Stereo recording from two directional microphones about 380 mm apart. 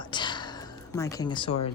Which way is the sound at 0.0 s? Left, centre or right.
Centre.